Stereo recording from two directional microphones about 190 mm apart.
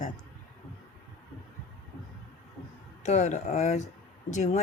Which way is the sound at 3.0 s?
35° left (ahead or behind).